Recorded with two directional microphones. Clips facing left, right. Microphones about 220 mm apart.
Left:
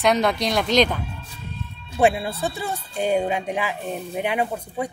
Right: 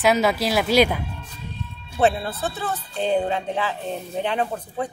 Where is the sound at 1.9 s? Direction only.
10° left (ahead or behind).